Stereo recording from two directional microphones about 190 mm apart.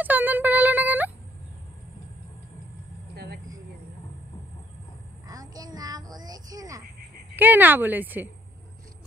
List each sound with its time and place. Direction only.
0.0 s a sound: 10° right (ahead or behind)
5.3 s child singing: 20° right (ahead or behind)
7.3 s speech: 10° right (ahead or behind)